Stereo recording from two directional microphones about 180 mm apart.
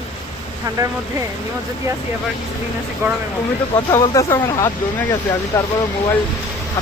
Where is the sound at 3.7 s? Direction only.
15° left (ahead or behind).